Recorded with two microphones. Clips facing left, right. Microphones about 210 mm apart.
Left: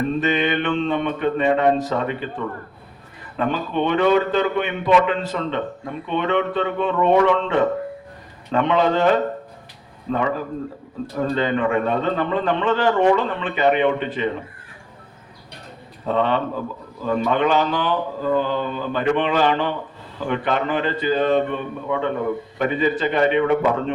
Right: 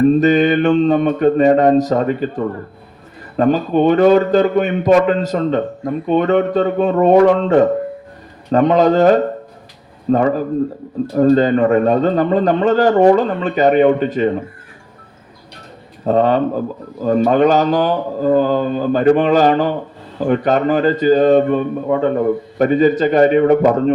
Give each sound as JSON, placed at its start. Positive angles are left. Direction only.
{"t": 0.0, "sound": "a man's voice", "side_deg": -40}
{"t": 16.0, "sound": "a man's voice", "side_deg": -40}